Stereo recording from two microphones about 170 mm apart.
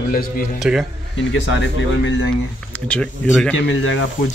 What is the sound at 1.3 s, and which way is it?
Speech, 90° left.